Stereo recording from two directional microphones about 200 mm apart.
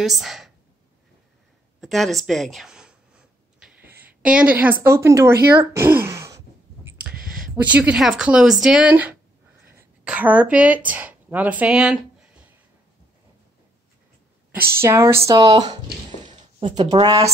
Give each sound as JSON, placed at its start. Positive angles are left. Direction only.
{"t": 0.0, "sound": "speech", "side_deg": 0}
{"t": 1.8, "sound": "a woman's voice", "side_deg": 0}
{"t": 5.6, "sound": "a sound", "side_deg": -15}
{"t": 7.1, "sound": "a sound", "side_deg": -45}
{"t": 7.6, "sound": "speech", "side_deg": -5}
{"t": 14.7, "sound": "speech", "side_deg": -15}